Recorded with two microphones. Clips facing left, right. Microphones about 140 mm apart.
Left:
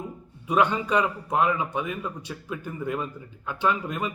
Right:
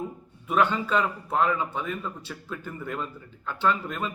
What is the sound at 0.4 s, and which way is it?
A man's voice, 15° left (ahead or behind).